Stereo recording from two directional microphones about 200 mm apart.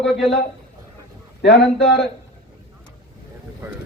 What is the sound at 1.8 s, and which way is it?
Speech, 60° left (ahead or behind).